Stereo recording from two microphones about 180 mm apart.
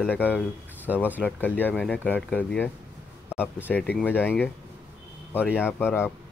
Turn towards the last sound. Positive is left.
turn(degrees=10)  # may be behind; listen again after turning